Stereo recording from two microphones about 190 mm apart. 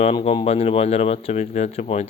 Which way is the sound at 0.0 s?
35° left (ahead or behind).